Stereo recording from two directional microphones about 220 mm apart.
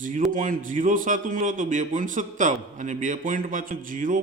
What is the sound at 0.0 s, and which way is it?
A man's voice, 40° right (ahead or behind).